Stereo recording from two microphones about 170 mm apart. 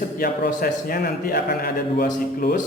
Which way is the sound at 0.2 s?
65° left (ahead or behind).